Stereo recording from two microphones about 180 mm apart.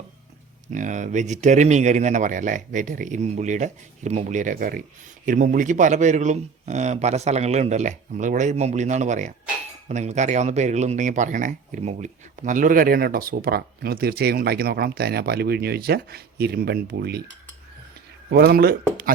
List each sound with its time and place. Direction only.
0.7 s a man's voice: 45° right (ahead or behind); by 17.2 s 60° right (ahead or behind)
18.3 s speech: 65° right (ahead or behind)